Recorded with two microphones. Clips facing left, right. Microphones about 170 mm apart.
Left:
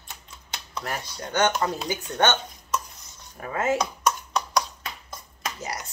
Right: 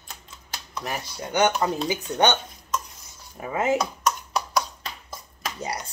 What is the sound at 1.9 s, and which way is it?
Speech, 15° right (ahead or behind).